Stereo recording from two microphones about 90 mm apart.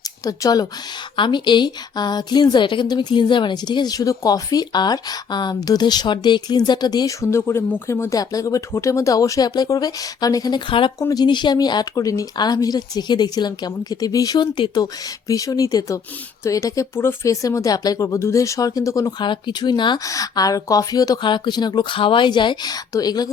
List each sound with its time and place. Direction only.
0.3 s a woman's voice: 45° left (ahead or behind)
1.1 s a woman's voice: 60° left (ahead or behind)
7.2 s speech: 30° left (ahead or behind)
8.2 s speech: 40° left (ahead or behind)
10.7 s speech: 70° left (ahead or behind)
11.1 s a woman's voice: 55° left (ahead or behind)
14.3 s speech: 60° left (ahead or behind)
15.3 s speech: 40° left (ahead or behind)
17.0 s speech: 25° left (ahead or behind)
17.4 s speech: 40° left (ahead or behind)
19.2 s speech: 60° left (ahead or behind)
20.1 s a woman's voice: 40° left (ahead or behind)
21.2 s speech: 60° left (ahead or behind)